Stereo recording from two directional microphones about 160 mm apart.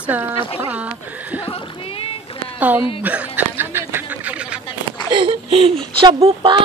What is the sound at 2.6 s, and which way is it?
Speech, 10° right (ahead or behind).